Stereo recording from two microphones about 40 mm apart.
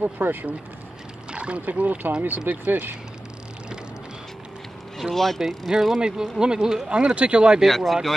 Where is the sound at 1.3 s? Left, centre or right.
Right.